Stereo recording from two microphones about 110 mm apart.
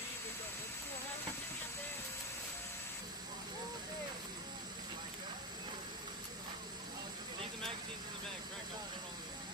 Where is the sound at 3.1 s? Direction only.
40° right (ahead or behind).